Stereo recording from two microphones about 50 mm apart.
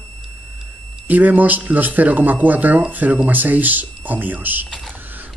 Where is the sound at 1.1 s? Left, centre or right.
Right.